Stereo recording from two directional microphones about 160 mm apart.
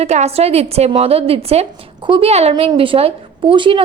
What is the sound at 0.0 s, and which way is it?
A woman's voice, 40° right (ahead or behind).